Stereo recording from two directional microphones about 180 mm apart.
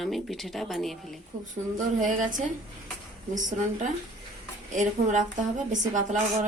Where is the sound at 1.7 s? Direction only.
45° right (ahead or behind).